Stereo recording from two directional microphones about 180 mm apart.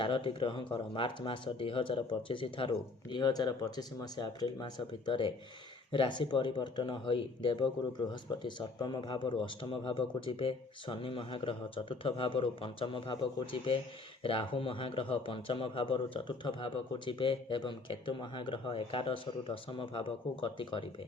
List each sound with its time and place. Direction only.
0.0 s speech: 30° left (ahead or behind)